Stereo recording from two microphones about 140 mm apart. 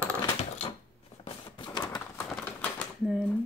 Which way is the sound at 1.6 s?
30° left (ahead or behind).